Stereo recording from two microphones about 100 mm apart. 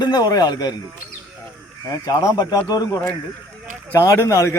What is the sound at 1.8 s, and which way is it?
A man's voice, 35° left (ahead or behind).